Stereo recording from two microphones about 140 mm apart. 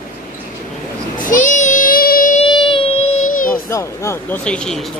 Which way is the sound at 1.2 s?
70° left (ahead or behind).